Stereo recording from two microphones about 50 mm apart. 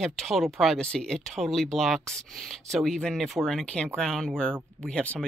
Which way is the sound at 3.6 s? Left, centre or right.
Centre.